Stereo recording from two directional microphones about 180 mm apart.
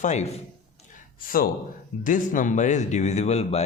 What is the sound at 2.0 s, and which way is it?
A man's voice, 45° left (ahead or behind).